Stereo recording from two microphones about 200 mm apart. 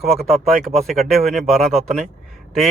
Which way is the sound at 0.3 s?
30° right (ahead or behind).